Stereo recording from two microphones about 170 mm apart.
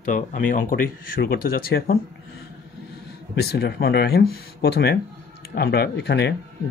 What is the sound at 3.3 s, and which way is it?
Speech, 70° left (ahead or behind).